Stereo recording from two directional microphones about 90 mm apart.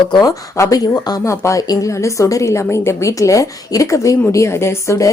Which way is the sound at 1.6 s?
45° left (ahead or behind).